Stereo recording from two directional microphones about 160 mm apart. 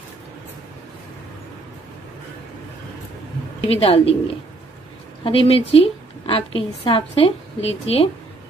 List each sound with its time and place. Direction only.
3.6 s a woman's voice: 40° left (ahead or behind)
5.2 s a woman's voice: 35° left (ahead or behind)